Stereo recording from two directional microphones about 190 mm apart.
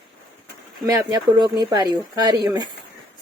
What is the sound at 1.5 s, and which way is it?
Speech, 20° right (ahead or behind).